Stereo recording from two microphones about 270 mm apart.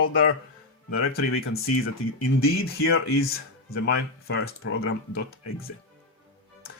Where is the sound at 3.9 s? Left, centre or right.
Left.